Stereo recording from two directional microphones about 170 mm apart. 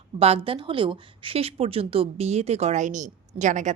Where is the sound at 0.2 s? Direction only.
35° right (ahead or behind).